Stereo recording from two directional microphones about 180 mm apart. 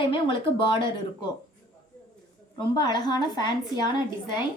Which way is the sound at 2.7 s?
25° left (ahead or behind).